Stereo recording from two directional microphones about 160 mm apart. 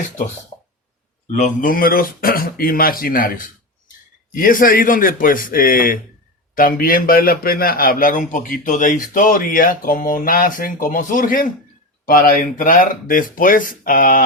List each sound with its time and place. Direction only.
1.3 s a man's voice: 55° left (ahead or behind)